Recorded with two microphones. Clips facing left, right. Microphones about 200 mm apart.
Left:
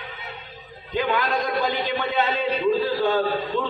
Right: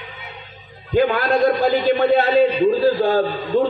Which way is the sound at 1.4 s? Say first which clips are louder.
Right 9 dB; 35° right (ahead or behind).